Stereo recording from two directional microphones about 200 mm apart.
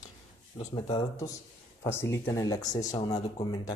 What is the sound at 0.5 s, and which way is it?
Speech, 25° left (ahead or behind).